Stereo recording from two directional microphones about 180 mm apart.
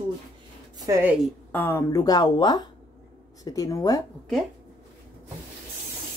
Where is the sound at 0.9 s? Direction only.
20° right (ahead or behind).